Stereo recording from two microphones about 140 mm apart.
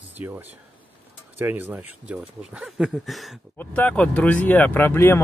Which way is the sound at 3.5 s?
10° left (ahead or behind).